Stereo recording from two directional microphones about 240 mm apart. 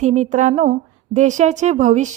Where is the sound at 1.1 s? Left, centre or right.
Right.